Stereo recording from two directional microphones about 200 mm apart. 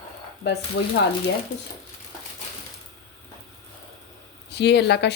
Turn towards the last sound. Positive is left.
turn(degrees=55)  # may be behind; listen again after turning